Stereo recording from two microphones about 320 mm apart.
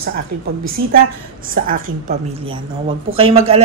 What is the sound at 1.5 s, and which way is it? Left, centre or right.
A woman's voice, right.